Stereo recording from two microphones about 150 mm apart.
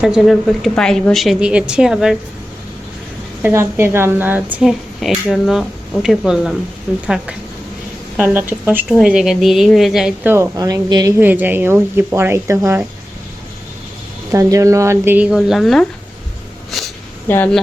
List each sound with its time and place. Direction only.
0.0 s a woman's voice: 5° right (ahead or behind)
3.4 s a woman's voice: 15° right (ahead or behind)
8.2 s speech: 15° right (ahead or behind)
8.9 s a woman's voice: centre (ahead or behind)
10.2 s speech: 20° right (ahead or behind)
11.2 s speech: 10° right (ahead or behind)
14.3 s speech: 20° right (ahead or behind); by 15.9 s centre (ahead or behind)
16.7 s a sound: centre (ahead or behind)
17.2 s speech: 15° left (ahead or behind)